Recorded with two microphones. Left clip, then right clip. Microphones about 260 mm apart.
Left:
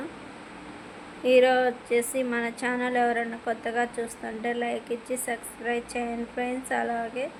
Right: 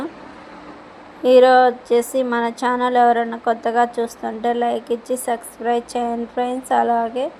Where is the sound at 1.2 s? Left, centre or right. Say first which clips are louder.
Right 9 dB; right.